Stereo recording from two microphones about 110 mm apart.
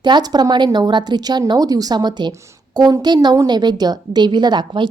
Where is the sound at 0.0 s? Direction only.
40° right (ahead or behind).